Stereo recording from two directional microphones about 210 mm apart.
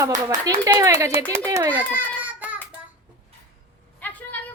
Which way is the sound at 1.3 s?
15° right (ahead or behind).